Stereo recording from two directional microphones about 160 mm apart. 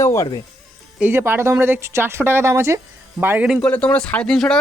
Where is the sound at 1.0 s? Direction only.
15° right (ahead or behind).